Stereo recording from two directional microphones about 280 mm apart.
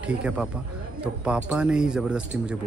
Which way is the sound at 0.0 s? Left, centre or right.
Centre.